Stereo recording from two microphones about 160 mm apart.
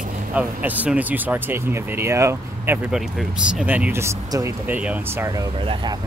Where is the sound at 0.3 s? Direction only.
10° right (ahead or behind).